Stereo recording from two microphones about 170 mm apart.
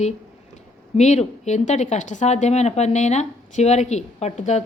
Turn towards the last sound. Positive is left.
turn(degrees=40)  # may be behind; listen again after turning